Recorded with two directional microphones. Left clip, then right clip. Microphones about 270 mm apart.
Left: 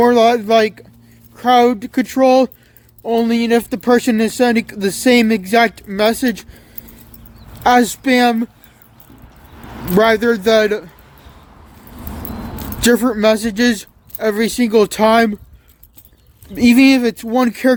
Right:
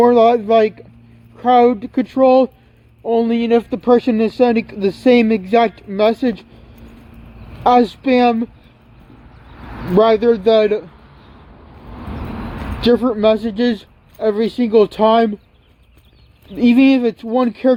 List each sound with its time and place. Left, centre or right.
0.0 s speech: centre
7.6 s speech: left
9.9 s speech: left
12.8 s speech: left
16.6 s speech: centre